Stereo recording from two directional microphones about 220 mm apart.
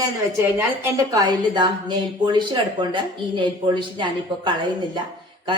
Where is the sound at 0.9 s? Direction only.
15° right (ahead or behind).